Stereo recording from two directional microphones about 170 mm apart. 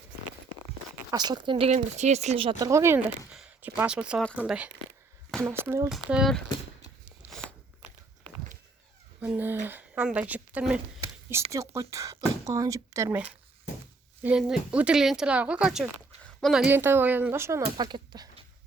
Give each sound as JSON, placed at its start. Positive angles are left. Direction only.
{"t": 1.1, "sound": "speech", "side_deg": -25}
{"t": 2.6, "sound": "speech", "side_deg": -15}
{"t": 5.9, "sound": "speech", "side_deg": 0}
{"t": 7.0, "sound": "a sound", "side_deg": -5}
{"t": 9.2, "sound": "speech", "side_deg": -10}
{"t": 11.5, "sound": "speech", "side_deg": -20}